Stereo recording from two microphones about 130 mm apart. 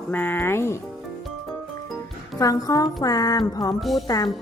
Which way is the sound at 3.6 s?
Centre (ahead or behind).